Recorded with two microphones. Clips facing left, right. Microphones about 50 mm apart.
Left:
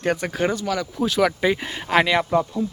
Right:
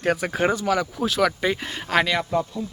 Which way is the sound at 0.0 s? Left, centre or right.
Centre.